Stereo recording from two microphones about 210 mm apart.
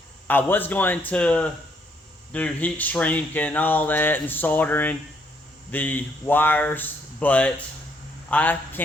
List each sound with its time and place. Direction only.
0.3 s speech: 10° left (ahead or behind)